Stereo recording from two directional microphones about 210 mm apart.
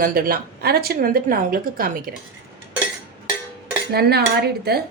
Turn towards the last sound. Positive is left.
turn(degrees=-50)  # may be behind; listen again after turning